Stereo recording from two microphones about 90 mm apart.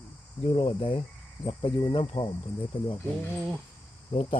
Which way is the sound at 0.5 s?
80° left.